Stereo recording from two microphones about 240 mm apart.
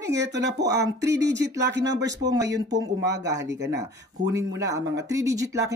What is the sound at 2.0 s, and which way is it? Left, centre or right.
Speech, centre.